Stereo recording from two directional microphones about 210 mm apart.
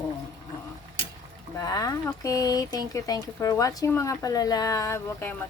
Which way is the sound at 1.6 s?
15° left (ahead or behind).